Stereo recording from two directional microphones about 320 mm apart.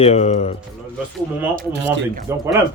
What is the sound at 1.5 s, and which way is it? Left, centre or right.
Speech, right.